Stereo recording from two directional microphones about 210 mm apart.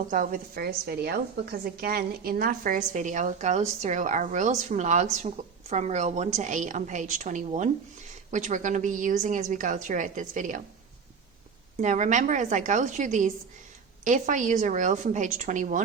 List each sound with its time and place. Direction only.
0.1 s a woman's voice: 40° right (ahead or behind)
11.8 s a woman's voice: 35° right (ahead or behind)